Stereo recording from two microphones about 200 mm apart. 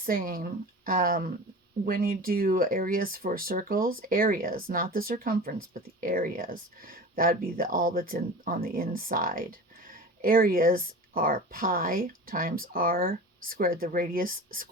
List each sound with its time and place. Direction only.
0.0 s speech: 45° right (ahead or behind)